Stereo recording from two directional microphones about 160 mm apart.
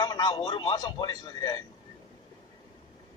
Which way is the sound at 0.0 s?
25° left (ahead or behind).